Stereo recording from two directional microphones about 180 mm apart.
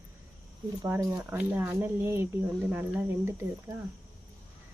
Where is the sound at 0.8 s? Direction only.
15° right (ahead or behind).